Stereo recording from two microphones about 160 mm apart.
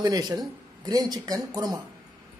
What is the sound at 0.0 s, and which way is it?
Speech, 25° right (ahead or behind).